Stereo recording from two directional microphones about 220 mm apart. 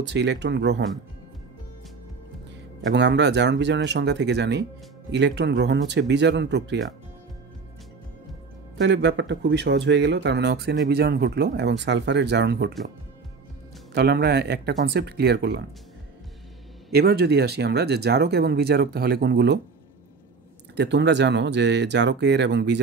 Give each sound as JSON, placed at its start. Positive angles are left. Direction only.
{"t": 0.0, "sound": "speech", "side_deg": -50}
{"t": 2.9, "sound": "speech", "side_deg": -50}
{"t": 8.7, "sound": "speech", "side_deg": -55}
{"t": 13.9, "sound": "speech", "side_deg": -45}
{"t": 16.9, "sound": "speech", "side_deg": -45}
{"t": 20.7, "sound": "speech", "side_deg": -50}